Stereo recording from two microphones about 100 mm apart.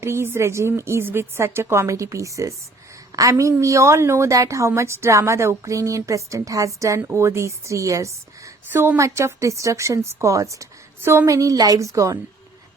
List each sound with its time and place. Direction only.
0.0 s a woman's voice: 25° right (ahead or behind)